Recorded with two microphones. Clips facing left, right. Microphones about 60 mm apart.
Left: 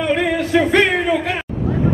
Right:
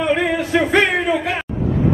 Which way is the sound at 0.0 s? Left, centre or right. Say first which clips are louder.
Even; centre.